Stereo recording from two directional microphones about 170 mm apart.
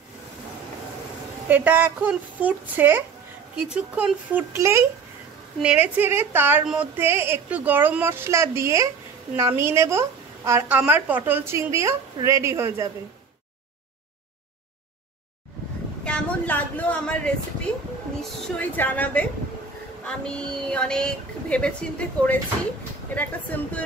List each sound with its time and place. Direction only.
1.5 s a woman's voice: 10° right (ahead or behind)
16.0 s a sound: 5° left (ahead or behind)
18.6 s a woman's voice: 10° left (ahead or behind)